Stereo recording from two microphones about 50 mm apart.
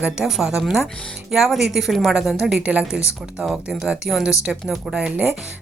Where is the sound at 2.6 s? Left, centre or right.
Right.